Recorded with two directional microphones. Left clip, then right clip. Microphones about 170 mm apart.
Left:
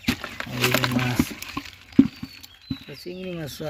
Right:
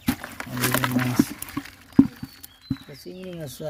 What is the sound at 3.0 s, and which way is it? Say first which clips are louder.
Speech: left 4 dB; 5° right (ahead or behind).